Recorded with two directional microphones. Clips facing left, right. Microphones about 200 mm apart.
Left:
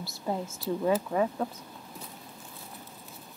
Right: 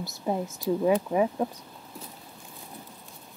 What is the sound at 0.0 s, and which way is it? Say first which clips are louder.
Speech: right 3 dB; 20° right (ahead or behind).